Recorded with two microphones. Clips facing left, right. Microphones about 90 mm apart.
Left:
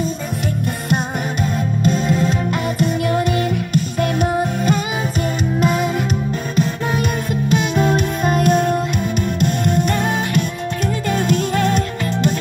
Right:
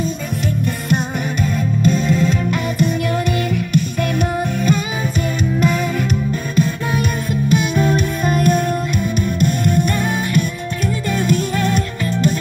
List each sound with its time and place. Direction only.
2.0 s music: 45° left (ahead or behind)
3.2 s music: 30° left (ahead or behind)
7.5 s music: 30° left (ahead or behind)
11.1 s music: 60° left (ahead or behind)